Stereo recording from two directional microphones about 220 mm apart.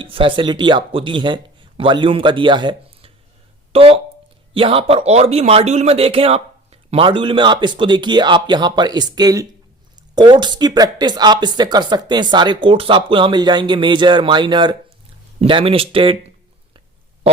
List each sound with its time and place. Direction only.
0.0 s a man's voice: 25° right (ahead or behind)